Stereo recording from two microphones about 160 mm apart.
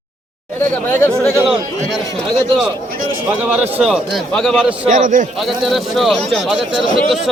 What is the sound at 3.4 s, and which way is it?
Speech, 10° right (ahead or behind).